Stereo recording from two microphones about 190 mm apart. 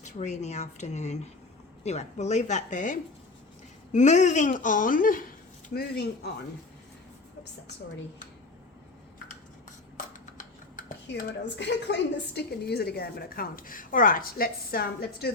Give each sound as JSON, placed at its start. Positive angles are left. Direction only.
{"t": 0.0, "sound": "a woman's voice", "side_deg": 35}
{"t": 10.8, "sound": "a woman's voice", "side_deg": 55}